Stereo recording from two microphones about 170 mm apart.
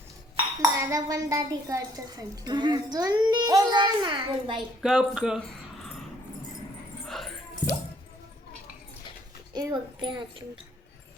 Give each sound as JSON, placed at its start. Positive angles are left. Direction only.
{"t": 0.6, "sound": "speech", "side_deg": -20}
{"t": 4.8, "sound": "speech", "side_deg": -5}
{"t": 7.1, "sound": "music", "side_deg": 0}
{"t": 9.6, "sound": "speech", "side_deg": -25}